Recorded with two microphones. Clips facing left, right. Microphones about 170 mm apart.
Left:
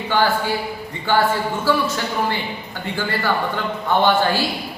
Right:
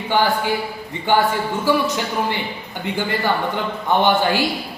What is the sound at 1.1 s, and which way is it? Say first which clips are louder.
Speech: right 1 dB; 15° right (ahead or behind).